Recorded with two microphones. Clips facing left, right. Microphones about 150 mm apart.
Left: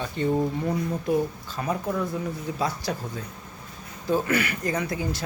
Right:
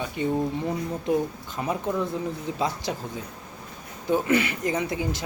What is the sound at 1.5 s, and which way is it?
Speech, 20° right (ahead or behind).